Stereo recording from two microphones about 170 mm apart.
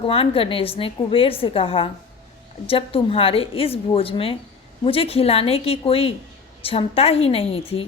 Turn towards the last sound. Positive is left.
turn(degrees=35)  # may be behind; listen again after turning